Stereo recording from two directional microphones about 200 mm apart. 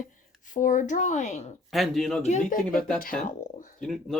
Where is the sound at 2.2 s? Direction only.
35° left (ahead or behind).